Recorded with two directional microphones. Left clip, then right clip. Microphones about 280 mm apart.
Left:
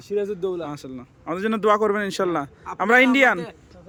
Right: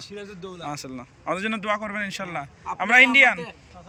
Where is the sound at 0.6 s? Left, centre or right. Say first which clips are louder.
Left 1 dB; centre.